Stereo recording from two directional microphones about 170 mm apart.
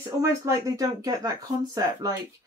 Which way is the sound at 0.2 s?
20° right (ahead or behind).